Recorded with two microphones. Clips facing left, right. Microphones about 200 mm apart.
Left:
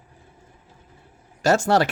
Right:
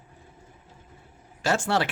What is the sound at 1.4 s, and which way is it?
Speech, 40° left (ahead or behind).